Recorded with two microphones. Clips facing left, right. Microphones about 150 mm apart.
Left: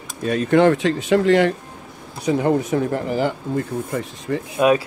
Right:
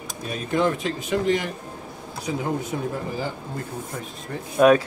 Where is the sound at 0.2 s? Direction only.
75° left (ahead or behind).